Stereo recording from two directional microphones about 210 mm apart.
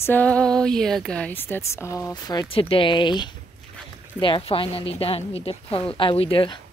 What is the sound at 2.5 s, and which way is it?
Speech, 25° left (ahead or behind).